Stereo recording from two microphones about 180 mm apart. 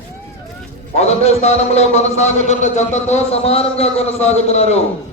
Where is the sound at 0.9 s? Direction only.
35° left (ahead or behind).